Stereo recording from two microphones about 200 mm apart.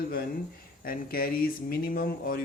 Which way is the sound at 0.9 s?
45° left (ahead or behind).